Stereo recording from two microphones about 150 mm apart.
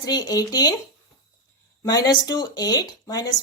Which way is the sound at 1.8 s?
25° left (ahead or behind).